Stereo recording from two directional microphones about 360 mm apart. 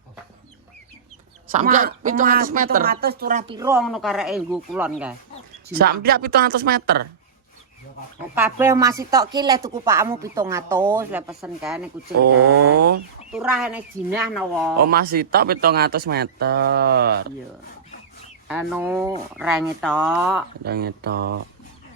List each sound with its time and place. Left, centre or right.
1.5 s speech: right; by 5.1 s centre
5.7 s speech: right
8.4 s a woman's voice: centre
12.5 s speech: right
13.3 s speech: centre
14.8 s speech: right
18.4 s speech: centre
20.7 s speech: right